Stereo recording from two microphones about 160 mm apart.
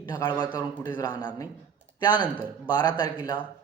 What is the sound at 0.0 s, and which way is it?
A man's voice, 25° left (ahead or behind).